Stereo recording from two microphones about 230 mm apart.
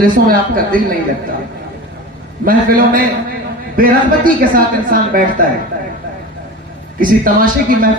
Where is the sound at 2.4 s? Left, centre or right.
Right.